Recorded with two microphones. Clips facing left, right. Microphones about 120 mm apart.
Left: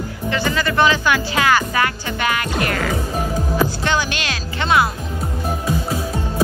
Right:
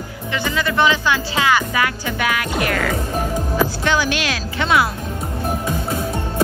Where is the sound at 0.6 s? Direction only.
20° right (ahead or behind).